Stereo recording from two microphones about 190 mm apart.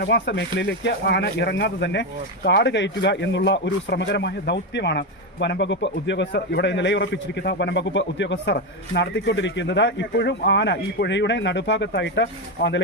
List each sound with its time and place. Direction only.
0.0 s speech: 65° left (ahead or behind)